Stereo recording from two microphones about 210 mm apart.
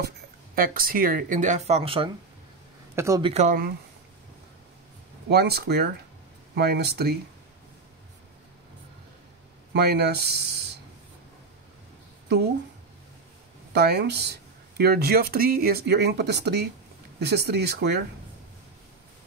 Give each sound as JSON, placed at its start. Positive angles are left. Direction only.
{"t": 0.6, "sound": "speech", "side_deg": -45}
{"t": 3.0, "sound": "speech", "side_deg": -15}
{"t": 3.3, "sound": "speech", "side_deg": -35}
{"t": 5.3, "sound": "speech", "side_deg": -50}
{"t": 9.7, "sound": "speech", "side_deg": -50}
{"t": 13.7, "sound": "speech", "side_deg": -50}